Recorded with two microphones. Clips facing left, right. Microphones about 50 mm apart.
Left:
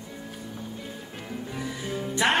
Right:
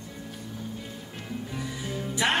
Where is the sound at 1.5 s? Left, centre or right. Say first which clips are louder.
Left 3 dB; centre.